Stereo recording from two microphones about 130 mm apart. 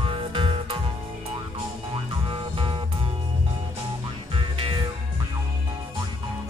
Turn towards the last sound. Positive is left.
turn(degrees=-40)  # may be behind; listen again after turning